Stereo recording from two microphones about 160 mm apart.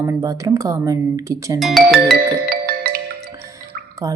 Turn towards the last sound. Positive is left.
turn(degrees=-20)  # may be behind; listen again after turning